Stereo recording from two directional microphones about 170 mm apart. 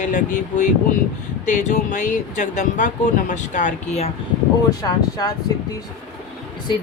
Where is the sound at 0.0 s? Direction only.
45° left (ahead or behind).